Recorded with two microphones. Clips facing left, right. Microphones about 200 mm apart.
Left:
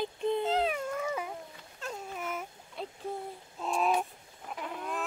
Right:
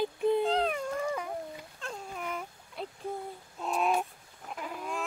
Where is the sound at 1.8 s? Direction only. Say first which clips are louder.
Left 2 dB; 5° left (ahead or behind).